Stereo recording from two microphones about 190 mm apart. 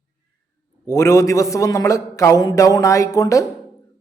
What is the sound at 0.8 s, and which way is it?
A man's voice, 15° left (ahead or behind).